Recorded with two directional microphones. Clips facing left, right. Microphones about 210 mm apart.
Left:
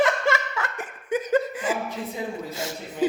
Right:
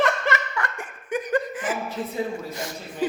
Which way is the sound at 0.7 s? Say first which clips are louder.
Left 2 dB; 25° left (ahead or behind).